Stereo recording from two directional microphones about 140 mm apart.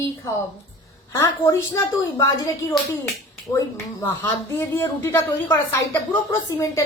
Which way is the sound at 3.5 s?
20° left (ahead or behind).